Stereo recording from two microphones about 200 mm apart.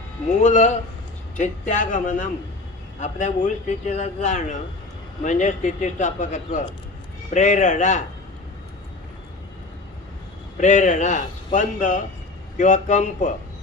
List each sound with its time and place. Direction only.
0.4 s speech: 35° left (ahead or behind)
10.6 s speech: 35° left (ahead or behind)